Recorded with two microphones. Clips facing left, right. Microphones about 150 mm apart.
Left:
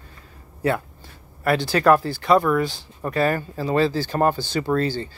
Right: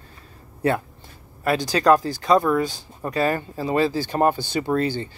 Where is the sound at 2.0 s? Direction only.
40° right (ahead or behind).